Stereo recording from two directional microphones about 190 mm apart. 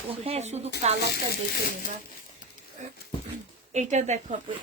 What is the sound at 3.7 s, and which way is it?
Speech, 35° right (ahead or behind).